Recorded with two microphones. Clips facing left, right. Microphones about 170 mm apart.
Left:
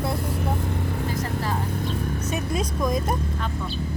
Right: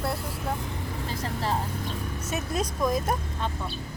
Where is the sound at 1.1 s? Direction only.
30° right (ahead or behind).